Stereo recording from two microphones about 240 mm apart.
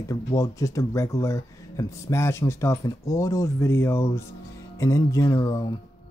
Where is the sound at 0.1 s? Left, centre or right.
Centre.